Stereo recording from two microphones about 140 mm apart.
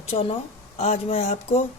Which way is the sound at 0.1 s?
45° left (ahead or behind).